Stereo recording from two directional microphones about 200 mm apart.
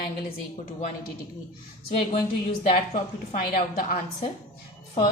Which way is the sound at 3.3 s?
45° left (ahead or behind).